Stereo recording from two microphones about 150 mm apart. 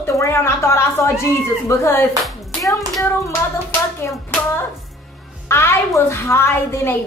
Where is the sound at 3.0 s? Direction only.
15° left (ahead or behind).